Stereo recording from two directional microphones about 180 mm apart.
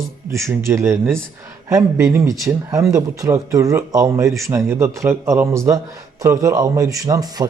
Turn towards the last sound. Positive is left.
turn(degrees=-20)  # may be behind; listen again after turning